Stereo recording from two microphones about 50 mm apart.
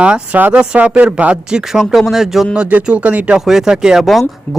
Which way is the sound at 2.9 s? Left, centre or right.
Right.